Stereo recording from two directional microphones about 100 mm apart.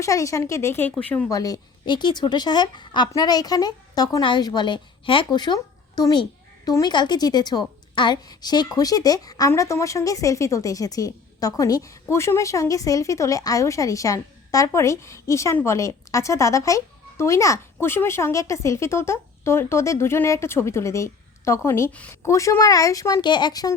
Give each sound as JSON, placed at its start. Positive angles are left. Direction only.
{"t": 0.0, "sound": "a woman's voice", "side_deg": 30}
{"t": 1.3, "sound": "a woman's voice", "side_deg": 35}
{"t": 5.5, "sound": "a sound", "side_deg": 40}
{"t": 6.7, "sound": "a woman's voice", "side_deg": 40}
{"t": 23.2, "sound": "a woman's voice", "side_deg": 50}